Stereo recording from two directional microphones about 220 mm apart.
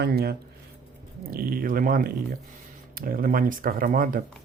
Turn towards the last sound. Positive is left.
turn(degrees=-40)  # may be behind; listen again after turning